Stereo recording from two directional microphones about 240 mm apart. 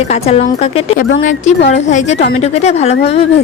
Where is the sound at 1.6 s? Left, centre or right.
Left.